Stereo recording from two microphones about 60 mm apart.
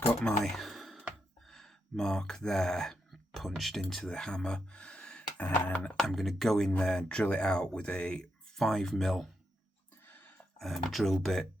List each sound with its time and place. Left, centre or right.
0.2 s speech: centre
0.5 s sigh: centre
1.5 s speech: centre
5.4 s music: left
6.0 s speech: centre
10.1 s a sound: left
10.6 s speech: centre